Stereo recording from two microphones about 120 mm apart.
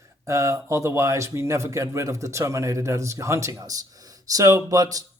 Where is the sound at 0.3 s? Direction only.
25° right (ahead or behind).